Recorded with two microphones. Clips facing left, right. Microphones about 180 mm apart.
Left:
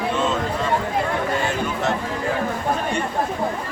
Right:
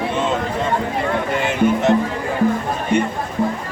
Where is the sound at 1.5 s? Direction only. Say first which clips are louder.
Right 7 dB; 20° right (ahead or behind).